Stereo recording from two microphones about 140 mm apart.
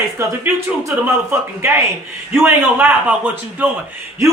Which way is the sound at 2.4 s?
10° right (ahead or behind).